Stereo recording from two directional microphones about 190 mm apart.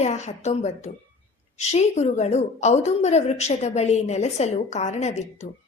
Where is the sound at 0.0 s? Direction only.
35° left (ahead or behind).